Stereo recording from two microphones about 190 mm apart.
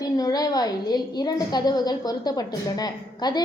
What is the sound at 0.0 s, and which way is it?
A woman's voice, 20° left (ahead or behind).